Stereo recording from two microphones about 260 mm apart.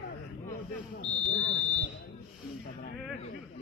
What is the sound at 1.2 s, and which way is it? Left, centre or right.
Speech, left.